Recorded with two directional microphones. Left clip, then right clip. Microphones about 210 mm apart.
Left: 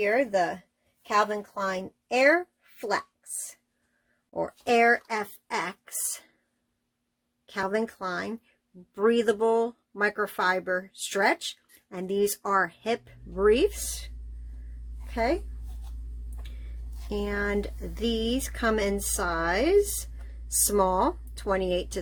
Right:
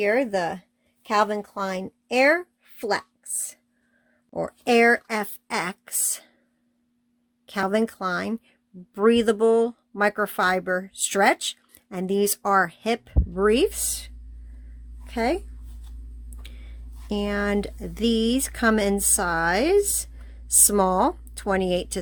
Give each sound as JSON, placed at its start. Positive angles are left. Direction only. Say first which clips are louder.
{"t": 0.0, "sound": "speech", "louder": "right 2 dB", "side_deg": -50}
{"t": 4.4, "sound": "speech", "louder": "right 3 dB", "side_deg": -50}
{"t": 7.4, "sound": "speech", "louder": "right 5 dB", "side_deg": -45}
{"t": 16.4, "sound": "a sound", "louder": "right 5 dB", "side_deg": -45}
{"t": 20.7, "sound": "speech", "louder": "right 2 dB", "side_deg": -45}